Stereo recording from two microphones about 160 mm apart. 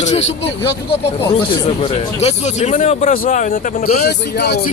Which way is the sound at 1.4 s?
40° left (ahead or behind).